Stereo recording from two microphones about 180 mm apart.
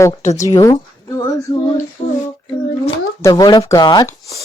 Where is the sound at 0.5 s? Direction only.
20° left (ahead or behind).